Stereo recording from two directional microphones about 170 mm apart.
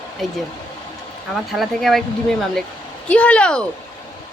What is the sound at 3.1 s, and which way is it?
Speech, 5° left (ahead or behind).